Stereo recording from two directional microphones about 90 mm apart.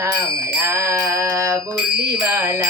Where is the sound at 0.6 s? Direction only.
30° right (ahead or behind).